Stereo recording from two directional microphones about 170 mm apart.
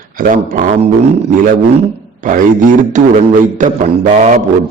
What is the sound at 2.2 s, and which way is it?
A man's voice, 50° right (ahead or behind).